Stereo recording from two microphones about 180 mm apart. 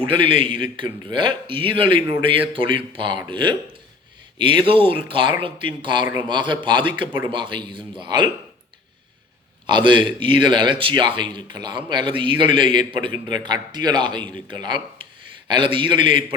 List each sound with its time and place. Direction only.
0.1 s a man's voice: 30° right (ahead or behind)
9.6 s a man's voice: 25° right (ahead or behind)